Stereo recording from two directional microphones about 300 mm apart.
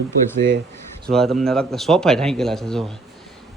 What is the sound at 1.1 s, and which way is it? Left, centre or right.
A man's voice, centre.